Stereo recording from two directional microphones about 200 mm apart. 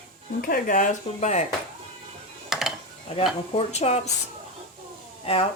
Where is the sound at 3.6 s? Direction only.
30° left (ahead or behind).